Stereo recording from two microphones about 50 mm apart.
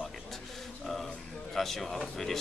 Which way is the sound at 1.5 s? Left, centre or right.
Centre.